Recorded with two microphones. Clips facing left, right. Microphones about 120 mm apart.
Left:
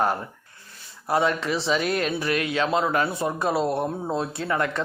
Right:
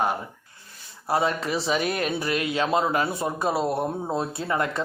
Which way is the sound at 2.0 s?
20° right (ahead or behind).